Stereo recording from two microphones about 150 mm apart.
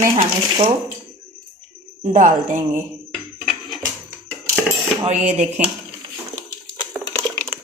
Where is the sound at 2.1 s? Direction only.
55° right (ahead or behind).